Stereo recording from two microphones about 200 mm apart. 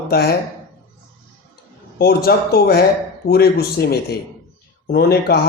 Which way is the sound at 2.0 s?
50° left (ahead or behind).